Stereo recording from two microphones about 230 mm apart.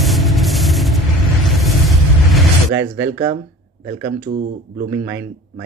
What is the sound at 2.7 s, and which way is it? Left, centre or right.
Speech, centre.